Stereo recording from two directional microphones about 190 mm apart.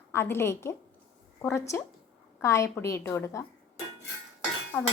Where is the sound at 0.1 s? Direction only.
10° left (ahead or behind).